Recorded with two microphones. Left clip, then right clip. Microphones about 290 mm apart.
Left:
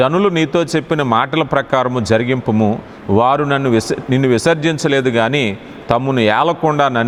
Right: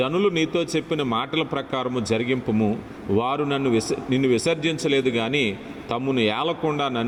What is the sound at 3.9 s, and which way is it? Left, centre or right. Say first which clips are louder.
Speech: left 6 dB; left.